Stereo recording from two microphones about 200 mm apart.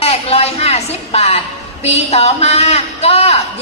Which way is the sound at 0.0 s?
30° left (ahead or behind).